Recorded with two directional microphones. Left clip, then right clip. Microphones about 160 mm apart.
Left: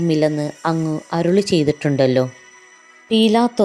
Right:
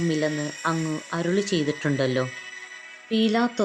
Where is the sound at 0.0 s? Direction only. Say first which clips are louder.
Left 7 dB; 30° left (ahead or behind).